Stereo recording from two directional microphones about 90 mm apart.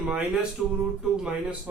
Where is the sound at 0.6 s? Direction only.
Centre (ahead or behind).